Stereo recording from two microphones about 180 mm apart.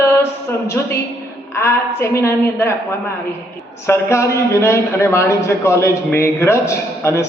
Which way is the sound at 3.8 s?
15° left (ahead or behind).